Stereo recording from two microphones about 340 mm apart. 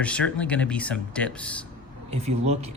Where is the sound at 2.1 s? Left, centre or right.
Centre.